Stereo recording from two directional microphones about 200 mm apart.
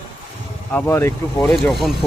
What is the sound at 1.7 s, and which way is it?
Speech, centre (ahead or behind).